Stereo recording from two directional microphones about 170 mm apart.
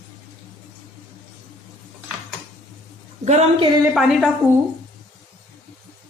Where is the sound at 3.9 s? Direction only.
5° right (ahead or behind).